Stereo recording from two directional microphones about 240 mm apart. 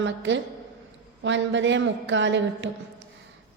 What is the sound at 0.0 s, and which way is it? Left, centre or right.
A woman's voice, right.